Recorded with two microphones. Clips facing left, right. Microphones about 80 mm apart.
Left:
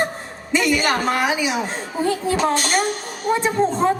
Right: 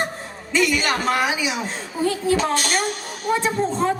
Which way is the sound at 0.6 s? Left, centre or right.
Left.